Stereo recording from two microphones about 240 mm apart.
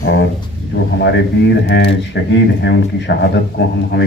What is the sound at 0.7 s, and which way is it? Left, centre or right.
Speech, left.